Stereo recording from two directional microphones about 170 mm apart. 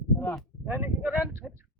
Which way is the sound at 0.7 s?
15° right (ahead or behind).